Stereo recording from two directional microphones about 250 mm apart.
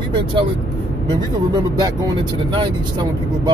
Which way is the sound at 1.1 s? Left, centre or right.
Centre.